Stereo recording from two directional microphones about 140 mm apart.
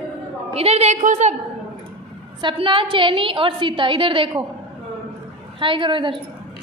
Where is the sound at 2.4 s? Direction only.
35° right (ahead or behind).